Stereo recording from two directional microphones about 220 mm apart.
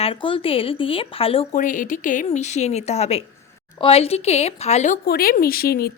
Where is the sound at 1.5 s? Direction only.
40° left (ahead or behind).